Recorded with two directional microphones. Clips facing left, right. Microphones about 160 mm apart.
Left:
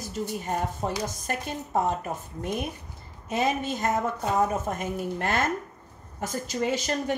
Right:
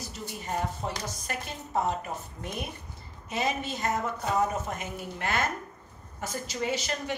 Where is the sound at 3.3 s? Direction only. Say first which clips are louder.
Left 4 dB; 45° left (ahead or behind).